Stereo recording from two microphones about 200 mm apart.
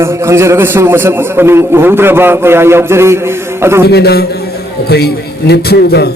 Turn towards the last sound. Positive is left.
turn(degrees=55)  # may be behind; listen again after turning